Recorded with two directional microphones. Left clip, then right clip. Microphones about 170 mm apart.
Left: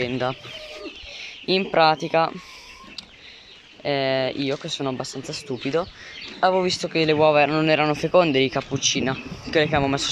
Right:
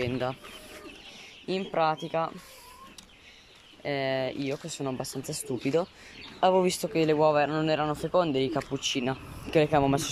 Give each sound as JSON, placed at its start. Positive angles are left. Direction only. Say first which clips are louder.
{"t": 0.0, "sound": "speech", "louder": "left 6 dB", "side_deg": -5}
{"t": 3.8, "sound": "speech", "louder": "left 7 dB", "side_deg": 0}
{"t": 5.0, "sound": "speech", "louder": "left 4 dB", "side_deg": -15}